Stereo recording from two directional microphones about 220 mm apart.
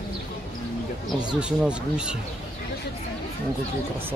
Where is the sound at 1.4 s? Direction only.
5° right (ahead or behind).